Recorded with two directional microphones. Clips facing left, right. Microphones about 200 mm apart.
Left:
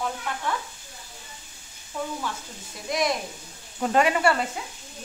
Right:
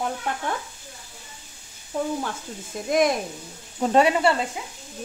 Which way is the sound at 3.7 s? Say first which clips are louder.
Right 3 dB; 25° right (ahead or behind).